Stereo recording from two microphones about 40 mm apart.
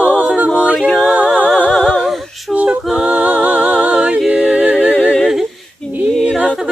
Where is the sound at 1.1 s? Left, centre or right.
Right.